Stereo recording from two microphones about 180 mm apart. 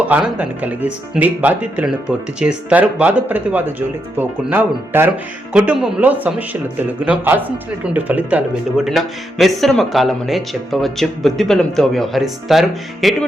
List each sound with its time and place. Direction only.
0.0 s speech: 10° right (ahead or behind)